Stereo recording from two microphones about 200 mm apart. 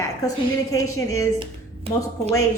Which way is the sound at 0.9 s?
15° left (ahead or behind).